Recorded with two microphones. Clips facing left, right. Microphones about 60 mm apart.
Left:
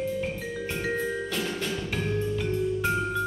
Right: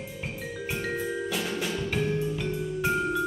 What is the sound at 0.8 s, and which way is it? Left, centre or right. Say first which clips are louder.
Music: left 3 dB; centre.